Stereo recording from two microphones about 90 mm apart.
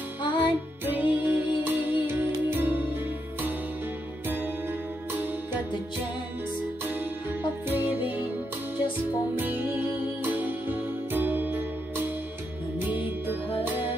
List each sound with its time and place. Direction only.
0.2 s music: 55° left (ahead or behind)
0.8 s music: 20° right (ahead or behind)
7.6 s music: 20° right (ahead or behind)
11.1 s music: 20° right (ahead or behind)
12.7 s music: 20° right (ahead or behind)